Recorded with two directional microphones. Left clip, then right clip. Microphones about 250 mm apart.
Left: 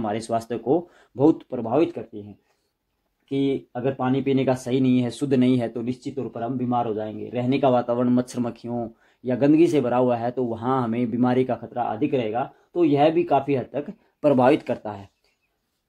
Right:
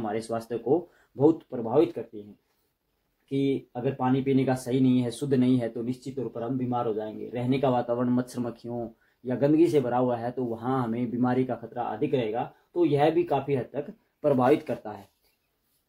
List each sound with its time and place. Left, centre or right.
0.0 s speech: left
3.3 s a man's voice: left